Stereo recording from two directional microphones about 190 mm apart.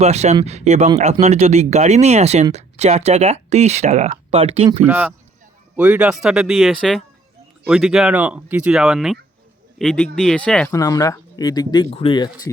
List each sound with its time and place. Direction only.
0.0 s speech: 35° right (ahead or behind)
4.9 s speech: 10° right (ahead or behind)
10.7 s speech: 20° left (ahead or behind)